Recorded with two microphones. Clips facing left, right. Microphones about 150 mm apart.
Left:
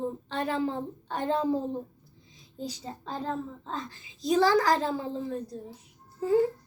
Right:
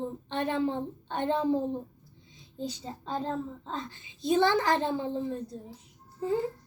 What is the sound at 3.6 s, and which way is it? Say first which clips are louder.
A child's voice: left 1 dB; 25° right (ahead or behind).